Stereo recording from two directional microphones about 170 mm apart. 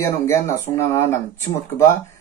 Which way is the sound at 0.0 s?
15° left (ahead or behind).